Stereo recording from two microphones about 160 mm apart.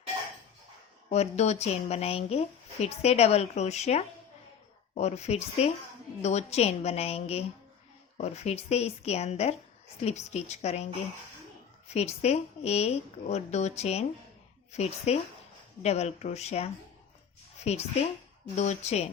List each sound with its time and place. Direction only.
1.1 s a woman's voice: 45° left (ahead or behind)
11.9 s a woman's voice: 40° left (ahead or behind)